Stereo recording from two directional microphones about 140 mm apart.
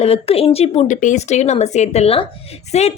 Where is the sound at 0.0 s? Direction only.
45° left (ahead or behind).